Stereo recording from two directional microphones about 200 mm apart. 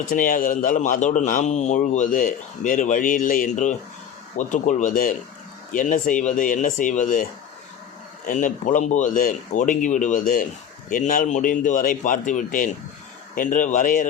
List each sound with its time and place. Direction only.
0.1 s a man's voice: 45° left (ahead or behind)